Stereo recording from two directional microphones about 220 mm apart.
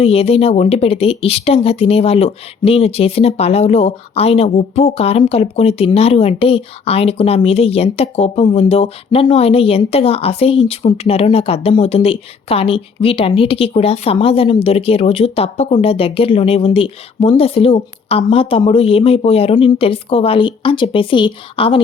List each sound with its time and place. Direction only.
0.0 s speech: 25° left (ahead or behind)